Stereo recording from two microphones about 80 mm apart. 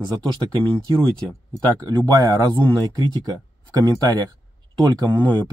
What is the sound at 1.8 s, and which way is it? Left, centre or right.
Speech, right.